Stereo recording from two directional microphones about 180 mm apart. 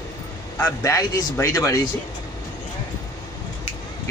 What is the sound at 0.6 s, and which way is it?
Speech, 15° left (ahead or behind).